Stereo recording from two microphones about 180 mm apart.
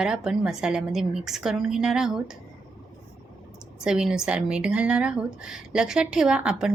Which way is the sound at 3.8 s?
5° right (ahead or behind).